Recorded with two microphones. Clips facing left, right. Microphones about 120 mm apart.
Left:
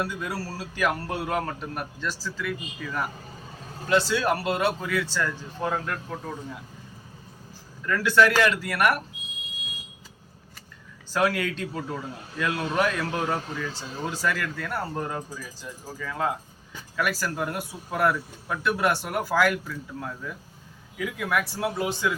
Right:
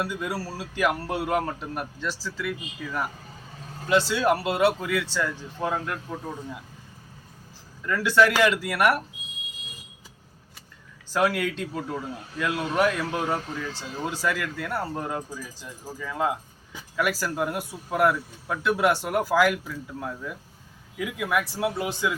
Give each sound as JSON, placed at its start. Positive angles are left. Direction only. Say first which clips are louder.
{"t": 0.0, "sound": "speech", "louder": "right 1 dB", "side_deg": -10}
{"t": 7.9, "sound": "speech", "louder": "even", "side_deg": -15}
{"t": 11.1, "sound": "speech", "louder": "right 1 dB", "side_deg": -15}